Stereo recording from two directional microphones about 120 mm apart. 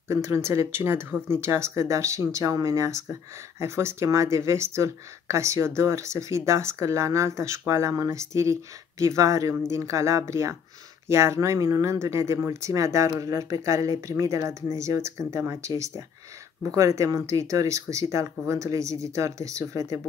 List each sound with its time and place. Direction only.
0.1 s speech: 25° right (ahead or behind)